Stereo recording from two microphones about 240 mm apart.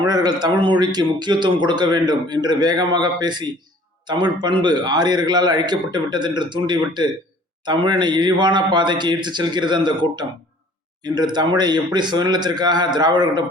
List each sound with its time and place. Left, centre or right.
0.0 s a man's voice: centre
11.0 s a man's voice: centre